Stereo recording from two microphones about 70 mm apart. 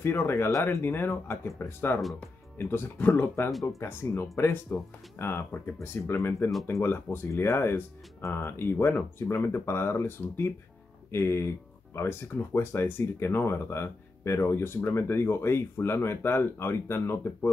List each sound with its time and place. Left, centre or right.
0.0 s speech: left